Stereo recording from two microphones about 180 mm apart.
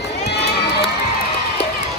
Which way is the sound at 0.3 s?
65° left (ahead or behind).